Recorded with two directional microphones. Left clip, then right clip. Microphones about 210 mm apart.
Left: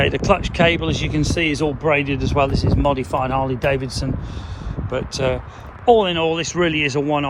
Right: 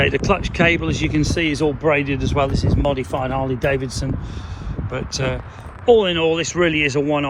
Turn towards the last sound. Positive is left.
turn(degrees=15)  # may be behind; listen again after turning